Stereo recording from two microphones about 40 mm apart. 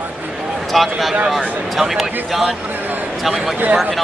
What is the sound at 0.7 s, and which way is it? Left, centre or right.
Speech, centre.